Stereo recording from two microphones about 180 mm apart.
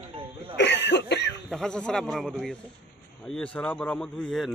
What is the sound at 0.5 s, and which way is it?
Cough, 75° left (ahead or behind).